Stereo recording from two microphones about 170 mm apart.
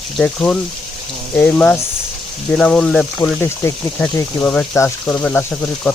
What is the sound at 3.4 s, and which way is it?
Speech, 15° left (ahead or behind).